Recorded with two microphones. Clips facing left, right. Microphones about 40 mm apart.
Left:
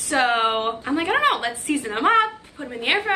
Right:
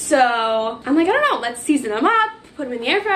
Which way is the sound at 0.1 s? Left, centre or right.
Centre.